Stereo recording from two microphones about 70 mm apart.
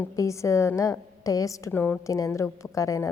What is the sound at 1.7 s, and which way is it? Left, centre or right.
Speech, left.